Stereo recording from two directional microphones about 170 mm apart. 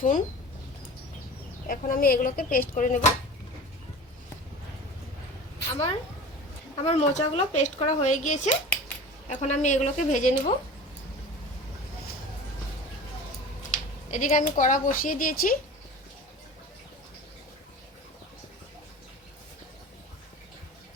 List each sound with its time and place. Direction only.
0.0 s speech: 50° left (ahead or behind)
1.6 s speech: 55° left (ahead or behind)
5.7 s a woman's voice: 35° left (ahead or behind)
14.1 s speech: 50° left (ahead or behind)